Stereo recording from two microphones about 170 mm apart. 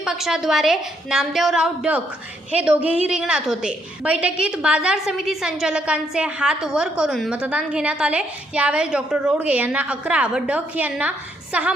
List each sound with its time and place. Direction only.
0.0 s a woman's voice: 5° right (ahead or behind)